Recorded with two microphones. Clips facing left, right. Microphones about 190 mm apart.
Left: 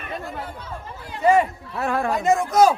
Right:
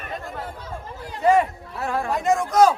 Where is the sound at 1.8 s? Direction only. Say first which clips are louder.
Left 3 dB; 65° left (ahead or behind).